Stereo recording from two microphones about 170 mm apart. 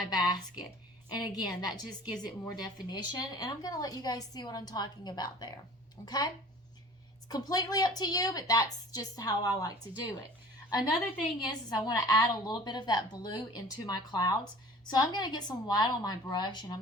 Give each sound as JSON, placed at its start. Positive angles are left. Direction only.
{"t": 0.1, "sound": "a woman's voice", "side_deg": 25}
{"t": 11.3, "sound": "a woman's voice", "side_deg": 25}